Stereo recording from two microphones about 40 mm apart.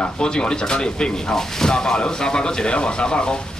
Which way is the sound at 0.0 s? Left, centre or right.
Left.